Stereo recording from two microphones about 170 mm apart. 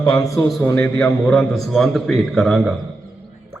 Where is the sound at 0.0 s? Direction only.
20° left (ahead or behind); by 2.7 s centre (ahead or behind).